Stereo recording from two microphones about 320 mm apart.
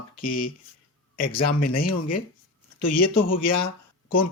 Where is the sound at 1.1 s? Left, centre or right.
Left.